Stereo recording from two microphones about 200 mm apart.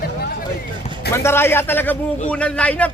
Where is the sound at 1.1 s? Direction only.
10° left (ahead or behind).